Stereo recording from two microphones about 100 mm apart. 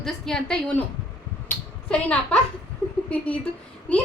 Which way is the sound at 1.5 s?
10° left (ahead or behind).